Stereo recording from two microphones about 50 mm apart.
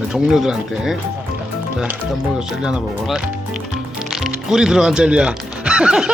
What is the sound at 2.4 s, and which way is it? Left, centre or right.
Speech, centre.